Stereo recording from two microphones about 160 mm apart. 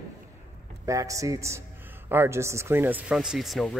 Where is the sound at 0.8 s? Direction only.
20° right (ahead or behind).